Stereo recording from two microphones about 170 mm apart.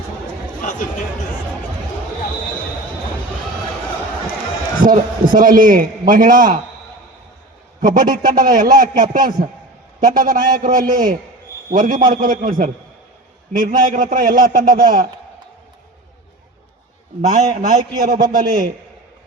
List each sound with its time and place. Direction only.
0.6 s a sound: 50° left (ahead or behind)
4.8 s a man's voice: 55° right (ahead or behind)
7.8 s a man's voice: 55° right (ahead or behind)
17.2 s a man's voice: 50° right (ahead or behind)